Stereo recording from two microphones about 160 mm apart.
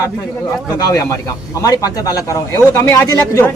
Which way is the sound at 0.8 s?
20° left (ahead or behind).